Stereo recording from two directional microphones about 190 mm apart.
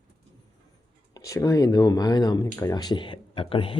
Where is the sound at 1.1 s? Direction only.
15° left (ahead or behind).